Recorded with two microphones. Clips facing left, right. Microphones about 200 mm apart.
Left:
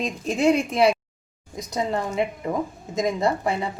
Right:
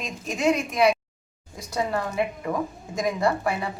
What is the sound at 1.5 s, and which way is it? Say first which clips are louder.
Speech: left 1 dB; 20° left (ahead or behind).